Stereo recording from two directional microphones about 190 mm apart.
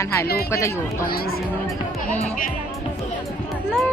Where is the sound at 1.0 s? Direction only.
50° left (ahead or behind).